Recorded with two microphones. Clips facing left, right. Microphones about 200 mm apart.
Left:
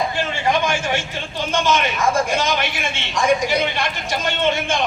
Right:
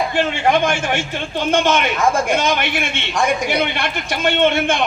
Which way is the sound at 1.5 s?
55° right (ahead or behind).